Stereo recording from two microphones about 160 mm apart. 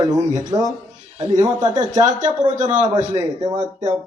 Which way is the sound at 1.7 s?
50° right (ahead or behind).